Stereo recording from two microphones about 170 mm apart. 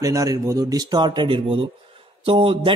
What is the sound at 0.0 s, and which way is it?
A man's voice, 20° right (ahead or behind).